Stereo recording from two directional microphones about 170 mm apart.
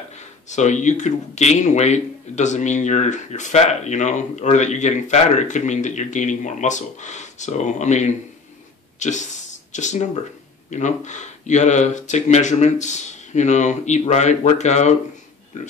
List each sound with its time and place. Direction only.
0.5 s speech: 45° left (ahead or behind)